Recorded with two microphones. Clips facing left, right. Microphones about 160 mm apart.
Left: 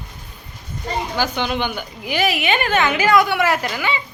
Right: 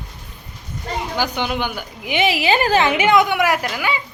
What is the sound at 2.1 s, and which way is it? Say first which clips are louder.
A woman's voice: right 2 dB; 25° right (ahead or behind).